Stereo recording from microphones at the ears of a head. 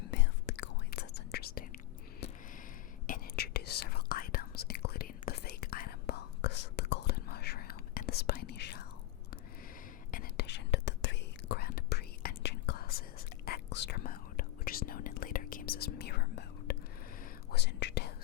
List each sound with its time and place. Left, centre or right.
0.0 s whispering: left
3.1 s whispering: left
10.1 s whispering: left